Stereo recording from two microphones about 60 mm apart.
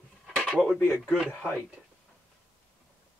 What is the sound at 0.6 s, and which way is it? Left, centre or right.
Speech, centre.